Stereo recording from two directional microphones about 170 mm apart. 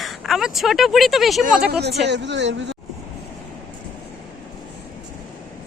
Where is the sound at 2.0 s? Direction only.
90° right.